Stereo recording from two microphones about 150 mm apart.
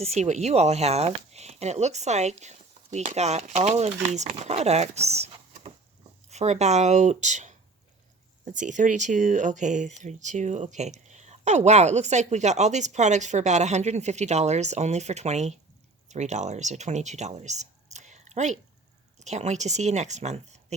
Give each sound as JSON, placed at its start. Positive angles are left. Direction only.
{"t": 0.0, "sound": "speech", "side_deg": -45}